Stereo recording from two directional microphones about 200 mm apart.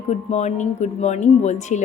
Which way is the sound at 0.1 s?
35° left (ahead or behind).